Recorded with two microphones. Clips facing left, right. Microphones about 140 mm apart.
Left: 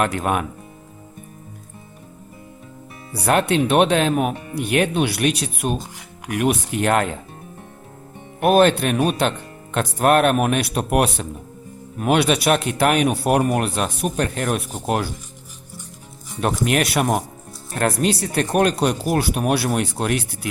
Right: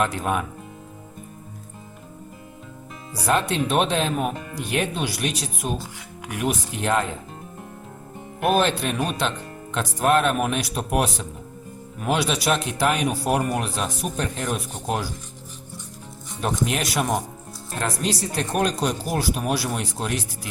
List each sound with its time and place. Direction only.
0.0 s speech: 60° left (ahead or behind)
3.2 s speech: 65° left (ahead or behind)
8.4 s speech: 60° left (ahead or behind)
16.4 s speech: 65° left (ahead or behind)